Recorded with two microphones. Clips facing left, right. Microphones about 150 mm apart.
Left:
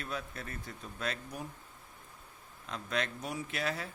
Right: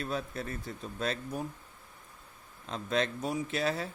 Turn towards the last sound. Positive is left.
turn(degrees=-30)  # may be behind; listen again after turning